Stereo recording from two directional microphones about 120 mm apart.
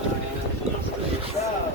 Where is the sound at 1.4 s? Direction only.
65° left (ahead or behind).